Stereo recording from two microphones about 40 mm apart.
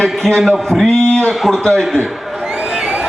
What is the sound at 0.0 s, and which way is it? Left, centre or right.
A man's voice, centre.